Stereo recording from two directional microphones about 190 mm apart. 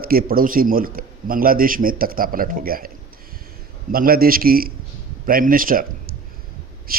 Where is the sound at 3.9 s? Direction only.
50° right (ahead or behind).